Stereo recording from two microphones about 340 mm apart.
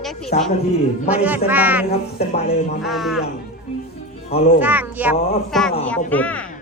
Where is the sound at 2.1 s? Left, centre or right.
Centre.